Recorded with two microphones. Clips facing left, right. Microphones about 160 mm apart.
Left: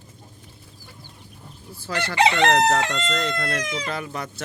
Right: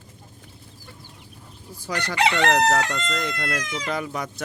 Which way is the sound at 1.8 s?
15° right (ahead or behind).